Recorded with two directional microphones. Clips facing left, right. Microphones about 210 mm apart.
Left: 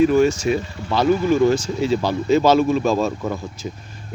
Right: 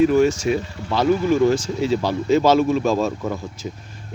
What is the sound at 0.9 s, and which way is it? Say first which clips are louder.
Speech: left 1 dB; 5° right (ahead or behind).